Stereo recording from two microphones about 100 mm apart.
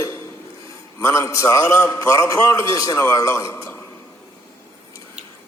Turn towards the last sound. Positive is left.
turn(degrees=30)  # may be behind; listen again after turning